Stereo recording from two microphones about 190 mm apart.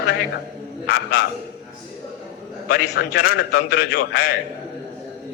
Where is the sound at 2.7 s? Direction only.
55° left (ahead or behind).